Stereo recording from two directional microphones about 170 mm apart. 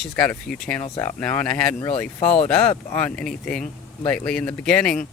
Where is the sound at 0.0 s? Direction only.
5° left (ahead or behind).